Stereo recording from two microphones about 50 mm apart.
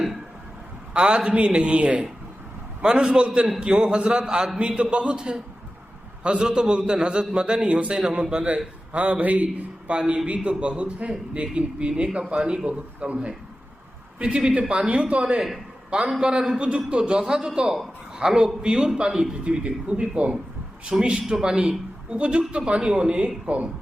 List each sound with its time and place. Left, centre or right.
0.9 s a man's voice: centre
10.0 s a man's voice: centre
10.2 s a man's voice: right